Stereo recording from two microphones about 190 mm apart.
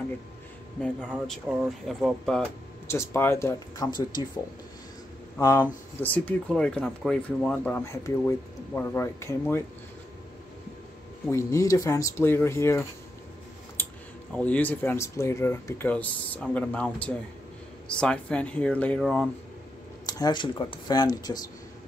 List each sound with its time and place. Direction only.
1.5 s speech: 5° right (ahead or behind)
2.9 s speech: 15° left (ahead or behind)
5.4 s speech: 15° left (ahead or behind)
11.2 s speech: 15° left (ahead or behind)
14.3 s speech: 5° left (ahead or behind)
20.1 s speech: 20° left (ahead or behind)